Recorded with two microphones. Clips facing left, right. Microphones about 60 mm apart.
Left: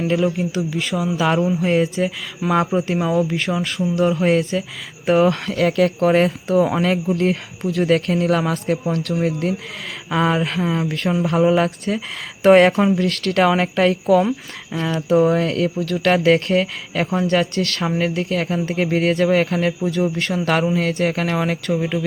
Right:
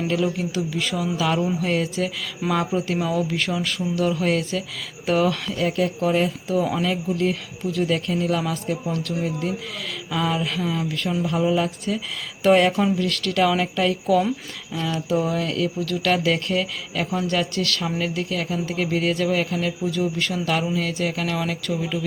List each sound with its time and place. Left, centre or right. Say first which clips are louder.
0.1 s speech: left 5 dB; left
1.1 s speech: left 5 dB; left
5.5 s speech: left 7 dB; left
6.0 s speech: left 5 dB; left